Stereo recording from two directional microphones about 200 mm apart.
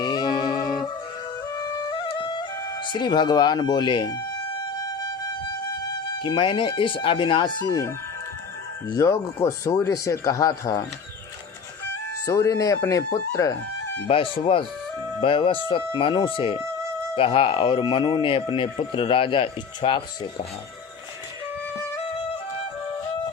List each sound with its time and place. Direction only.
0.0 s music: 20° left (ahead or behind)
7.6 s speech: 15° left (ahead or behind)
12.2 s speech: 15° left (ahead or behind)
14.1 s speech: 25° left (ahead or behind)